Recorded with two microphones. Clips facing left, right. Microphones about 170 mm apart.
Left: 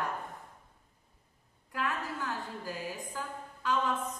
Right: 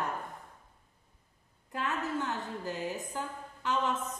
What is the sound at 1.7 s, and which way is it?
A woman's voice, 25° right (ahead or behind).